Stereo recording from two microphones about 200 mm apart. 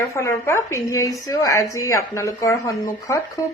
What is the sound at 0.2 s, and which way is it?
A woman's voice, 15° left (ahead or behind).